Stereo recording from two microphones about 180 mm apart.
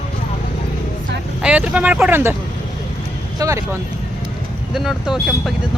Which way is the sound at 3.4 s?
15° right (ahead or behind).